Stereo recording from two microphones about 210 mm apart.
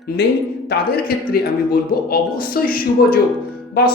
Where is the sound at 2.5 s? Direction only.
45° left (ahead or behind).